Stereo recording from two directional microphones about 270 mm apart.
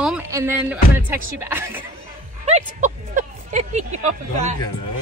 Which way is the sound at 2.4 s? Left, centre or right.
Right.